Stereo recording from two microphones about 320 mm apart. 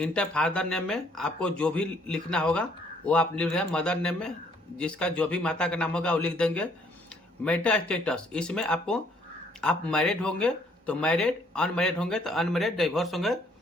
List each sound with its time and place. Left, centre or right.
0.0 s speech: centre